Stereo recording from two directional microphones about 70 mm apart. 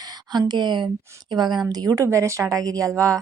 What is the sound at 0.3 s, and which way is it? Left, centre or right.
Speech, right.